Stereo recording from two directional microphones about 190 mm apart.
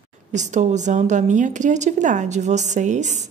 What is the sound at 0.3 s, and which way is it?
A woman's voice, 40° right (ahead or behind).